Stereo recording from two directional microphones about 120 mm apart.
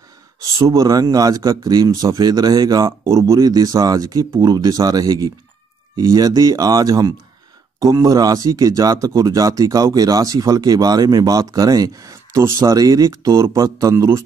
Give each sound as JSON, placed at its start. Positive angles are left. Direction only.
{"t": 0.4, "sound": "speech", "side_deg": -30}